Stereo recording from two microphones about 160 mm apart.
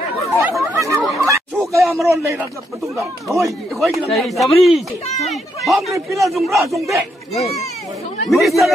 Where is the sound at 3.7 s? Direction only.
Centre (ahead or behind).